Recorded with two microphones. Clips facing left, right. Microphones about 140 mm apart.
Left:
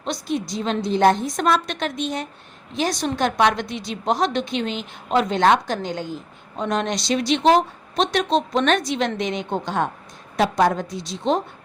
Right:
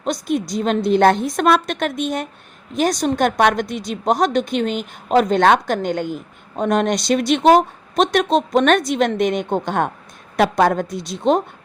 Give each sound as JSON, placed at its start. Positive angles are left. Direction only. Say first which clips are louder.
{"t": 0.0, "sound": "a woman's voice", "louder": "right 4 dB", "side_deg": -50}